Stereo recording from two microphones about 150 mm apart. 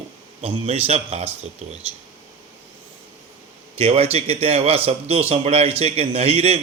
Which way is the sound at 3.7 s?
40° right (ahead or behind).